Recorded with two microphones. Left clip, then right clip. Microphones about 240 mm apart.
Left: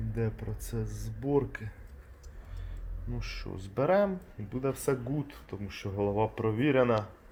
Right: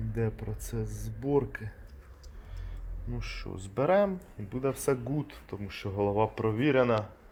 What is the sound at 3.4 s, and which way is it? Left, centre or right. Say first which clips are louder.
Speech: right 1 dB; centre.